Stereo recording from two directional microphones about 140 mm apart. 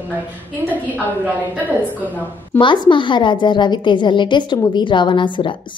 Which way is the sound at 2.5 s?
35° left (ahead or behind).